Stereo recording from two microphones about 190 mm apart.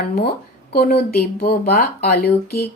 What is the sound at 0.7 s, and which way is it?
Speech, 55° left (ahead or behind).